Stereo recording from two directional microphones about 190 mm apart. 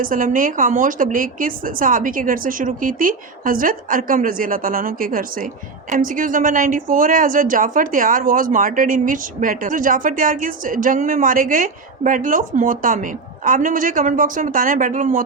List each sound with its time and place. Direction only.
0.0 s a woman's voice: 45° right (ahead or behind)